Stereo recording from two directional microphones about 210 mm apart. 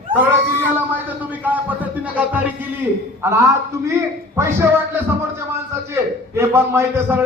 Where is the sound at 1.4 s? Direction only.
10° right (ahead or behind).